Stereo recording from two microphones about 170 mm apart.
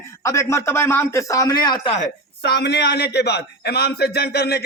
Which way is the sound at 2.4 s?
75° left (ahead or behind).